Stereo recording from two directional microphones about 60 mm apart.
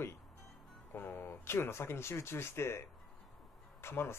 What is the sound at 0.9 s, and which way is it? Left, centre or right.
Speech, left.